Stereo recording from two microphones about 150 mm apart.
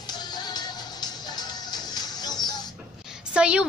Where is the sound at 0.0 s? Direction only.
30° left (ahead or behind).